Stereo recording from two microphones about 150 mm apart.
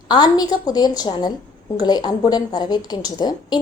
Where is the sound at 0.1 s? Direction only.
25° left (ahead or behind).